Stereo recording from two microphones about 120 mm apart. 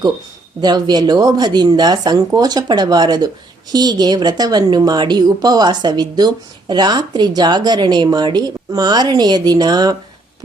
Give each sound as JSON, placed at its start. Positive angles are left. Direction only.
{"t": 0.6, "sound": "a woman's voice", "side_deg": -35}